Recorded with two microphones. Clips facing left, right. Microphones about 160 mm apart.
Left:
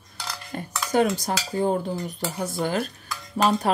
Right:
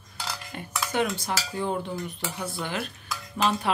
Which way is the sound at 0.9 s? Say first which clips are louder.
Left 6 dB; 40° left (ahead or behind).